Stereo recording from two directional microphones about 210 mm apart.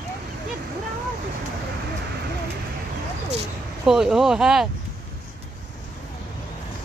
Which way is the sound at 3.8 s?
Centre (ahead or behind).